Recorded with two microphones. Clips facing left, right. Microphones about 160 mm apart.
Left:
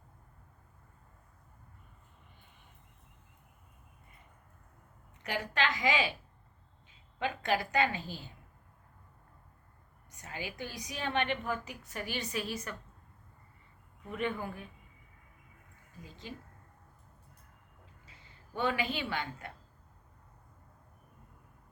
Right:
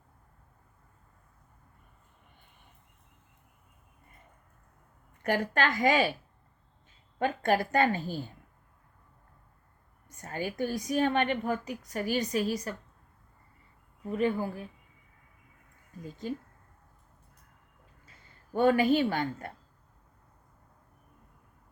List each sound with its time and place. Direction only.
5.2 s a woman's voice: 50° right (ahead or behind)
7.2 s a woman's voice: 45° right (ahead or behind)
10.1 s a woman's voice: 45° right (ahead or behind)
14.0 s speech: 35° right (ahead or behind)
16.0 s a woman's voice: 45° right (ahead or behind)
18.0 s a woman's voice: 45° right (ahead or behind)